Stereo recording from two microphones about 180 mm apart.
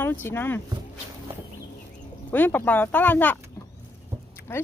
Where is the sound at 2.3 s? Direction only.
10° left (ahead or behind).